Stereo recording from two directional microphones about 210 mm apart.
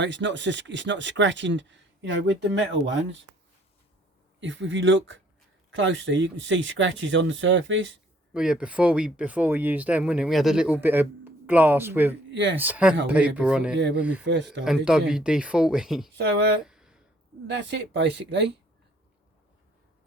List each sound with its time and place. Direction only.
0.0 s speech: 60° right (ahead or behind)
4.4 s speech: 60° right (ahead or behind)
8.3 s speech: 5° right (ahead or behind)
12.3 s speech: 55° right (ahead or behind)
12.5 s speech: 10° right (ahead or behind)
13.7 s speech: 55° right (ahead or behind)
14.0 s speech: 5° right (ahead or behind)
16.6 s a sound: 5° right (ahead or behind)
17.4 s speech: 55° right (ahead or behind)